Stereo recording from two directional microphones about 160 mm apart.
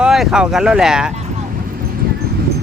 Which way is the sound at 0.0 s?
5° right (ahead or behind).